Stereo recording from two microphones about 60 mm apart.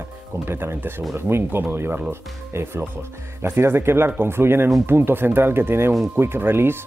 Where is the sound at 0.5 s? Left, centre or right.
Right.